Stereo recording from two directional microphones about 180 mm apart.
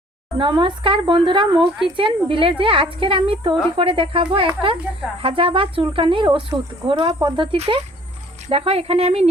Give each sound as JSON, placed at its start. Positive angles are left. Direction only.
{"t": 0.3, "sound": "speech", "side_deg": -25}